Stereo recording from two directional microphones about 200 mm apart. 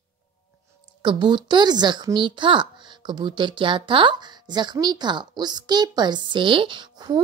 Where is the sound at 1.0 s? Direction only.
25° right (ahead or behind).